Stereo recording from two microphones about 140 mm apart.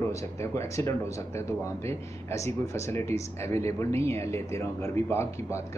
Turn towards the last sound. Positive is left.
turn(degrees=20)  # may be behind; listen again after turning